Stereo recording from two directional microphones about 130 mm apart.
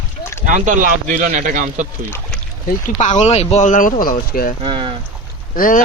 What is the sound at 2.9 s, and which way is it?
Speech, 65° left (ahead or behind).